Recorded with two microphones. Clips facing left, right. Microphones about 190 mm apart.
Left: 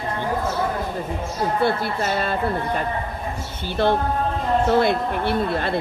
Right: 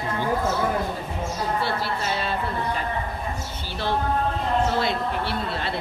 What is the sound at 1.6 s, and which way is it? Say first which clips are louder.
Speech: left 5 dB; 50° left (ahead or behind).